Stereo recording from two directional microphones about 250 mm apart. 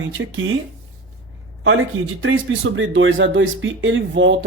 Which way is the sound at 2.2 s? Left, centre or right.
Right.